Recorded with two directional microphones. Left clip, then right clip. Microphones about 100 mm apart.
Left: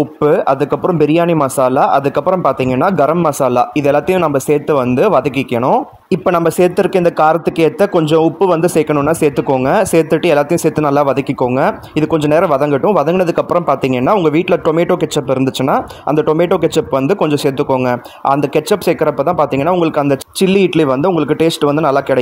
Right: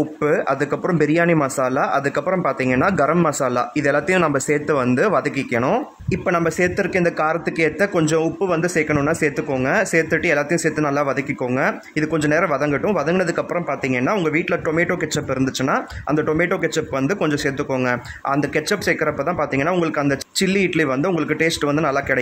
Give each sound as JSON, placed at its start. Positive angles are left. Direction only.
{"t": 0.9, "sound": "speech", "side_deg": 30}
{"t": 6.2, "sound": "speech", "side_deg": 50}
{"t": 13.7, "sound": "speech", "side_deg": 55}
{"t": 16.2, "sound": "speech", "side_deg": 45}
{"t": 17.2, "sound": "speech", "side_deg": 35}
{"t": 18.5, "sound": "speech", "side_deg": 50}